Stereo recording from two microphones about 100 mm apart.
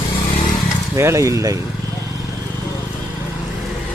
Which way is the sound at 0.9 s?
30° right (ahead or behind).